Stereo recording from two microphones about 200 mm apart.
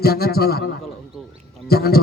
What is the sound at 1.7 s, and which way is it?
Speech, 50° left (ahead or behind).